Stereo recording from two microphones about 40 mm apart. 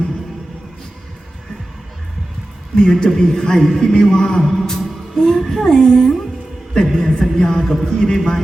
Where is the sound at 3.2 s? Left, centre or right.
Centre.